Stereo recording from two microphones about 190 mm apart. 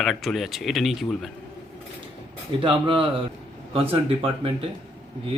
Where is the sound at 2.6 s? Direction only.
25° right (ahead or behind).